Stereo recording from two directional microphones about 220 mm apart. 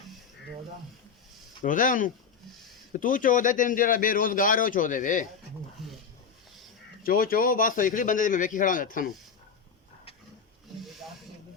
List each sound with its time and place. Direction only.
1.6 s a man's voice: 35° left (ahead or behind)
5.8 s a sound: centre (ahead or behind)
7.0 s a man's voice: 40° left (ahead or behind)